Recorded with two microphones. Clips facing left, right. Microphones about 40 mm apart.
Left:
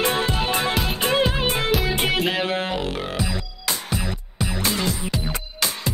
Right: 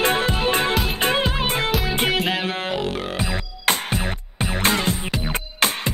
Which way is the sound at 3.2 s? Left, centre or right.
Right.